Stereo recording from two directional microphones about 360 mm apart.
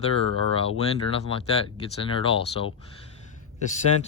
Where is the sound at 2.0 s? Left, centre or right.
Centre.